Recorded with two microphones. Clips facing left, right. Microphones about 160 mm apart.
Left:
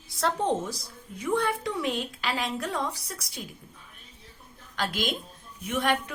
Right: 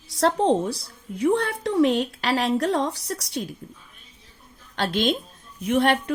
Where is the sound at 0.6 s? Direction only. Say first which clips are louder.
Right 7 dB; 65° right (ahead or behind).